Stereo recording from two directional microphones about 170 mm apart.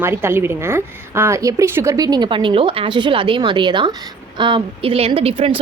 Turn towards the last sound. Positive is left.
turn(degrees=-35)  # may be behind; listen again after turning